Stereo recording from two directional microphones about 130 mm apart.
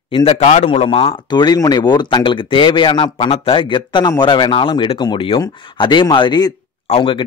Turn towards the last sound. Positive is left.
turn(degrees=45)  # may be behind; listen again after turning